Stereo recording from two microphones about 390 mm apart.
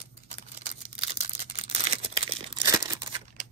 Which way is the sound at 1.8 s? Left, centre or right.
Centre.